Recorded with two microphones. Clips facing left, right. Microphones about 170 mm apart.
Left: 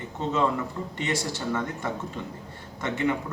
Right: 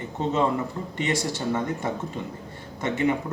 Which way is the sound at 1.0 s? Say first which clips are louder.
Right 3 dB; 20° right (ahead or behind).